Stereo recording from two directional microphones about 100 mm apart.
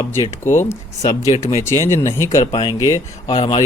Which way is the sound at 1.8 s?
25° left (ahead or behind).